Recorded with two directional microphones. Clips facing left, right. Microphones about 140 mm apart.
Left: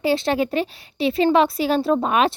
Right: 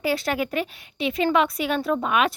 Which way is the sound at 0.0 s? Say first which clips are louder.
Left 5 dB; 30° left (ahead or behind).